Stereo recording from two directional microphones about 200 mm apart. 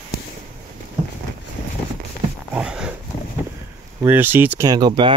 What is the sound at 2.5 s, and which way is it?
Dog, 5° right (ahead or behind).